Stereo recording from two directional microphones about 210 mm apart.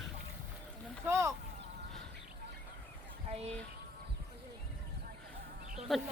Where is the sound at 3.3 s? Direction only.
30° right (ahead or behind).